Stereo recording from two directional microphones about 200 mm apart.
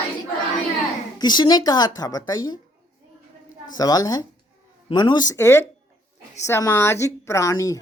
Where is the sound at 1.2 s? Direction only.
20° left (ahead or behind).